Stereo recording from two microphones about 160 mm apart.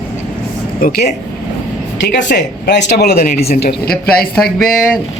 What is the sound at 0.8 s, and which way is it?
Speech, 90° left.